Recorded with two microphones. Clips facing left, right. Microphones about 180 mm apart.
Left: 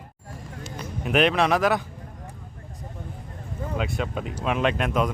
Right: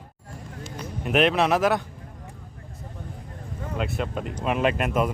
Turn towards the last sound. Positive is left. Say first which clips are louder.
# even
turn(degrees=-5)  # may be behind; listen again after turning